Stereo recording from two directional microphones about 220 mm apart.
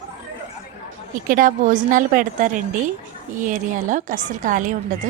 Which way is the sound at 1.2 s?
40° right (ahead or behind).